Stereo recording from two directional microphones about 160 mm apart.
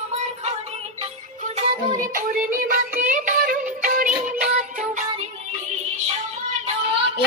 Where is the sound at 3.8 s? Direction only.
60° right (ahead or behind).